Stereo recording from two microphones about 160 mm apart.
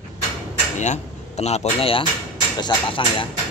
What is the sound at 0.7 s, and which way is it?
Speech, 45° left (ahead or behind).